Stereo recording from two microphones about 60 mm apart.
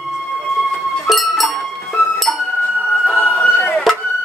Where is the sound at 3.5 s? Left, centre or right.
Left.